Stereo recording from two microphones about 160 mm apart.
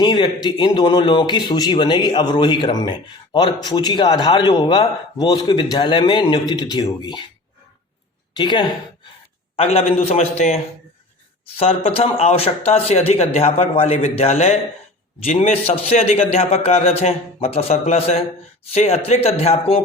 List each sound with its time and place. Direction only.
0.0 s a man's voice: 30° left (ahead or behind)
8.3 s a woman's voice: 30° left (ahead or behind)
9.6 s speech: 40° left (ahead or behind)